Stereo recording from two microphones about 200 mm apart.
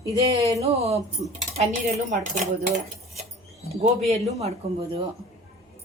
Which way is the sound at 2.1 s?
40° right (ahead or behind).